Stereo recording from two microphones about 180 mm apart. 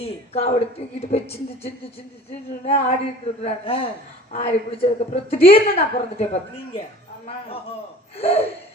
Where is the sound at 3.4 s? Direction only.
30° left (ahead or behind).